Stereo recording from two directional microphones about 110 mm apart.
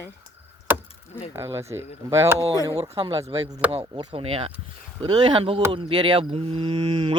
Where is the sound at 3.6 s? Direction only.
10° right (ahead or behind).